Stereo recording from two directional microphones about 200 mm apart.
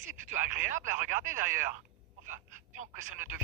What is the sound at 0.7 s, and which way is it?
Speech, 40° right (ahead or behind).